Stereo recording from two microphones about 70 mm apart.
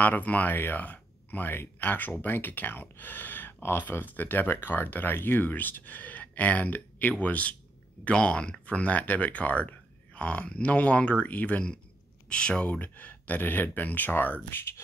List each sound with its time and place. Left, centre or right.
0.0 s speech: left